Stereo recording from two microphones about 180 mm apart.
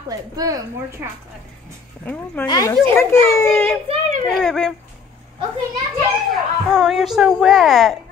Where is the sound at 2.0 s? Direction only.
10° left (ahead or behind).